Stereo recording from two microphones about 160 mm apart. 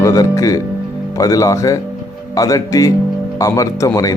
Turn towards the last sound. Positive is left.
turn(degrees=20)  # may be behind; listen again after turning